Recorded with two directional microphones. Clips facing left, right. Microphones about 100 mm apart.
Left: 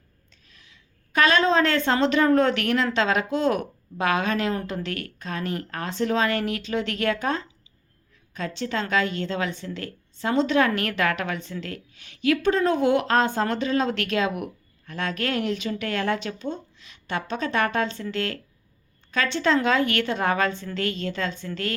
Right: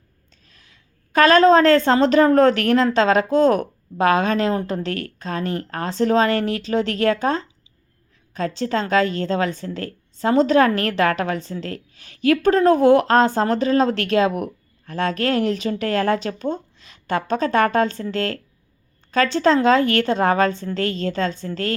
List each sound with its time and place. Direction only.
0.3 s a woman's voice: 40° right (ahead or behind)